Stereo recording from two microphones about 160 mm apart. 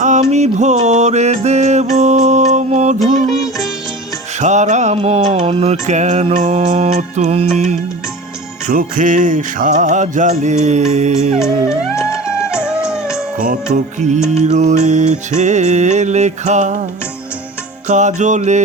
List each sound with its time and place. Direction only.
0.0 s music: 45° right (ahead or behind)
4.4 s music: 45° right (ahead or behind)
8.6 s music: 55° right (ahead or behind)
11.3 s music: 5° right (ahead or behind)
13.3 s music: 60° right (ahead or behind)
13.7 s music: 45° right (ahead or behind)
17.8 s music: 50° right (ahead or behind)